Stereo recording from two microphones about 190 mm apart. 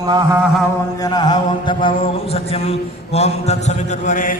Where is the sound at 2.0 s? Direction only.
30° left (ahead or behind).